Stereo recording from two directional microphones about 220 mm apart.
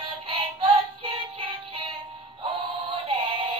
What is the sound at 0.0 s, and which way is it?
Music, 25° right (ahead or behind).